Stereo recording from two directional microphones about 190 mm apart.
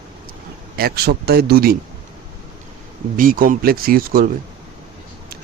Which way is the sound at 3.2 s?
45° right (ahead or behind).